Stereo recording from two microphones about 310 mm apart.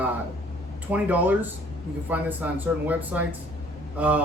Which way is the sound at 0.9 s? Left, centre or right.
Centre.